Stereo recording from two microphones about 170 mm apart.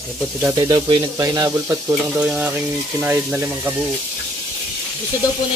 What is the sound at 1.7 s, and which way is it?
Speech, 5° right (ahead or behind).